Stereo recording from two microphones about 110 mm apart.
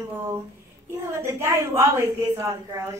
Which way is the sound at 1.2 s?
25° right (ahead or behind).